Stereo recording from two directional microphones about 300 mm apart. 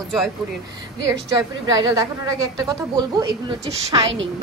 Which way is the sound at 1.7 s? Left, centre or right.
Centre.